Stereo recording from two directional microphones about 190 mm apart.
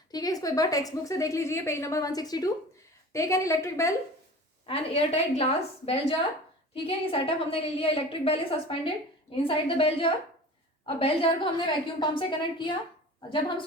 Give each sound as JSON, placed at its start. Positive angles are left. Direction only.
{"t": 0.1, "sound": "a woman's voice", "side_deg": 20}
{"t": 4.6, "sound": "a woman's voice", "side_deg": 30}